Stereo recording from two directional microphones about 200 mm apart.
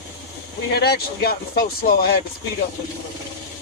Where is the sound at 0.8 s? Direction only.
55° left (ahead or behind).